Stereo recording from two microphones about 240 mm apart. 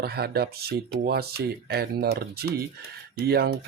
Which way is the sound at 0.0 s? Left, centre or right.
Right.